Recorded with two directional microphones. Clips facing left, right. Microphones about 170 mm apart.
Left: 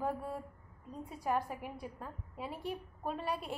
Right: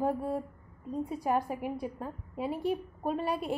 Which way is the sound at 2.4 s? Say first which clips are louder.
Right 9 dB; 5° right (ahead or behind).